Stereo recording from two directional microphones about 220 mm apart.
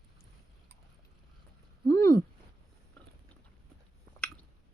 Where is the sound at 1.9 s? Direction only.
15° left (ahead or behind).